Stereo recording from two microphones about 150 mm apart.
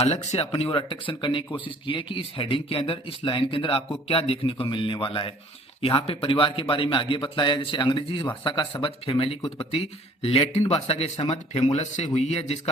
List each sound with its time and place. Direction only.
0.0 s speech: 45° left (ahead or behind)